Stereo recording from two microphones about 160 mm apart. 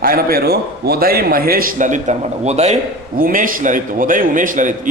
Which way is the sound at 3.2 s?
60° right (ahead or behind).